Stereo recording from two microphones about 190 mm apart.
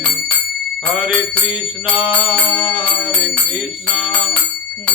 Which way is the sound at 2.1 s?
25° left (ahead or behind).